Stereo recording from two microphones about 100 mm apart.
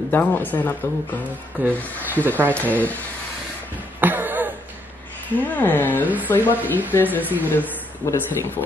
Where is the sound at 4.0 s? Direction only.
20° right (ahead or behind).